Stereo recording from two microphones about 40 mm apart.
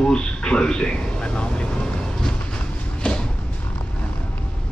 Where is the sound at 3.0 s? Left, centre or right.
Left.